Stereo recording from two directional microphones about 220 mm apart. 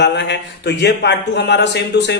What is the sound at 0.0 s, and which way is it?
A man's voice, 50° left (ahead or behind).